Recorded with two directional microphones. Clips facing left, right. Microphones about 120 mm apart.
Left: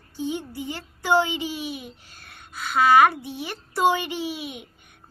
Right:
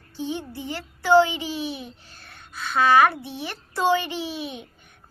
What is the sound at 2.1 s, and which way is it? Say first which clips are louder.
Speech: right 1 dB; 15° left (ahead or behind).